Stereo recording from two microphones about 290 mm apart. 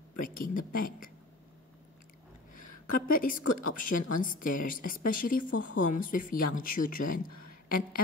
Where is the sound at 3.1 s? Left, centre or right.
Left.